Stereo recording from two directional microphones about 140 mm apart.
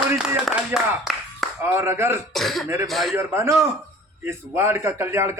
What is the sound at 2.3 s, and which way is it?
Speech, centre (ahead or behind).